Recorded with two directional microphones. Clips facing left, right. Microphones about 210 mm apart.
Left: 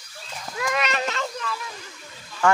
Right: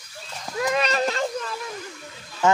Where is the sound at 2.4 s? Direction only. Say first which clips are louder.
Right 1 dB; 20° right (ahead or behind).